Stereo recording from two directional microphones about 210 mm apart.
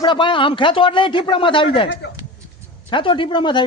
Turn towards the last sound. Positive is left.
turn(degrees=20)  # may be behind; listen again after turning